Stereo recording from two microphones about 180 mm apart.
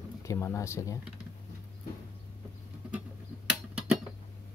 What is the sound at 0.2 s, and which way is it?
Speech, 15° left (ahead or behind).